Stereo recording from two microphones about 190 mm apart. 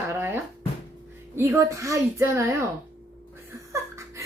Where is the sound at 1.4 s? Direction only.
15° right (ahead or behind).